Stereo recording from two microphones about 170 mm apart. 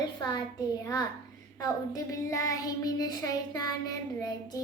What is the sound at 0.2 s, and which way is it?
Child singing, 25° left (ahead or behind).